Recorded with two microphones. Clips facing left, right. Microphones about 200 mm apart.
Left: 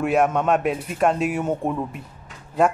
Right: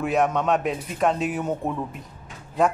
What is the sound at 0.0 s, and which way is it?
Speech, 5° left (ahead or behind).